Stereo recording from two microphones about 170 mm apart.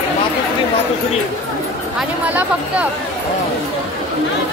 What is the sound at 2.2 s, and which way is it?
Speech, 10° right (ahead or behind).